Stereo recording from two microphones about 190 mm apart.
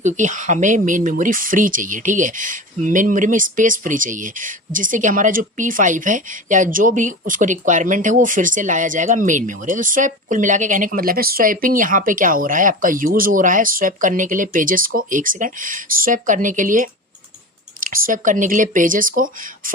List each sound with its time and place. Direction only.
0.0 s speech: 40° right (ahead or behind)